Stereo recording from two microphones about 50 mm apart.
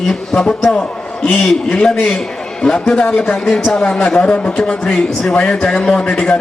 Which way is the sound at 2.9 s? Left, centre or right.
Left.